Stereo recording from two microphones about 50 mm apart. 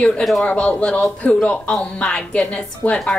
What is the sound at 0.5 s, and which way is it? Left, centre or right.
A woman's voice, left.